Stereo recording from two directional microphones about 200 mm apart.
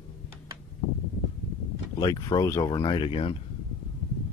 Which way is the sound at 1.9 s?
20° left (ahead or behind).